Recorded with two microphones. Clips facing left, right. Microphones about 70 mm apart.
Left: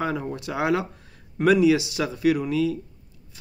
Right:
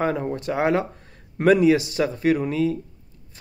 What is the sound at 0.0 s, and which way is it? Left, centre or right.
A man's voice, right.